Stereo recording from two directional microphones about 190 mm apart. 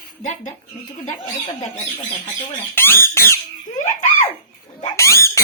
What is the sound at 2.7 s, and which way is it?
Speech, 10° left (ahead or behind).